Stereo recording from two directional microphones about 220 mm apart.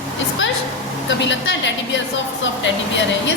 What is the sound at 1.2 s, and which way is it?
Speech, 55° left (ahead or behind).